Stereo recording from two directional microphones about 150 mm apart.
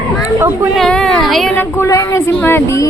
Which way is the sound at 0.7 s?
5° left (ahead or behind).